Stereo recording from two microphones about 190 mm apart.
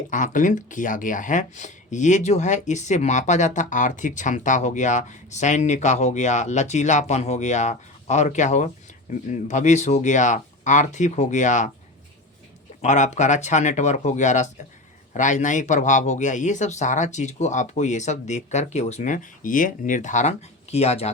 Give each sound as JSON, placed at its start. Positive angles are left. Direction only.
{"t": 0.1, "sound": "speech", "side_deg": 45}
{"t": 12.8, "sound": "speech", "side_deg": 40}